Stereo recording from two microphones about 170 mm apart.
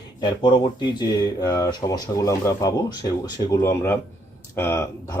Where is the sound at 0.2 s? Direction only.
25° left (ahead or behind).